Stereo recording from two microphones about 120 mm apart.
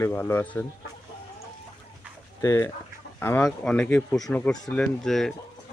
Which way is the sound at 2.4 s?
25° left (ahead or behind).